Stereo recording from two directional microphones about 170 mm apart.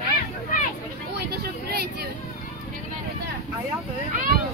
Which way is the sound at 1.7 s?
70° right (ahead or behind).